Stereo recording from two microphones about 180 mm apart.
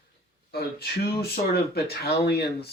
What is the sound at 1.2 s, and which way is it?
Speech, 60° left (ahead or behind).